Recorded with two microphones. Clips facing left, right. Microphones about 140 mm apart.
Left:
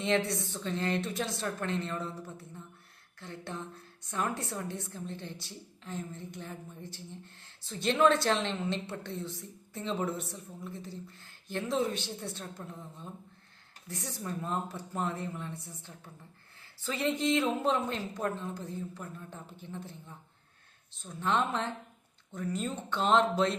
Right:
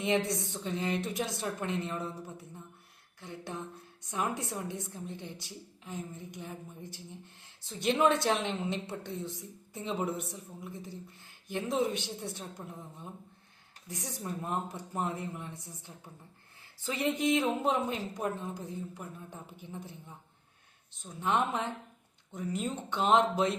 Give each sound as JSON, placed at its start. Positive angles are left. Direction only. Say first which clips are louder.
{"t": 0.0, "sound": "speech", "louder": "even", "side_deg": -15}